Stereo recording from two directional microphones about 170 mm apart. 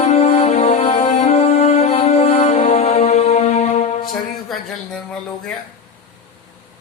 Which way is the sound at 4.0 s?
55° left (ahead or behind).